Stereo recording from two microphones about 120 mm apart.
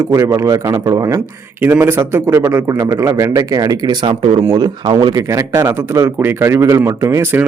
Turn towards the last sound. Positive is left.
turn(degrees=-25)  # may be behind; listen again after turning